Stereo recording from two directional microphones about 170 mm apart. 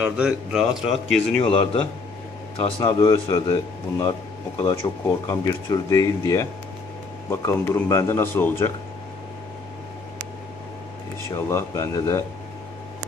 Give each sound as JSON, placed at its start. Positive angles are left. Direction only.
{"t": 0.0, "sound": "a man's voice", "side_deg": -5}
{"t": 1.4, "sound": "a man's voice", "side_deg": 35}
{"t": 2.8, "sound": "a man's voice", "side_deg": 20}
{"t": 11.3, "sound": "a man's voice", "side_deg": 15}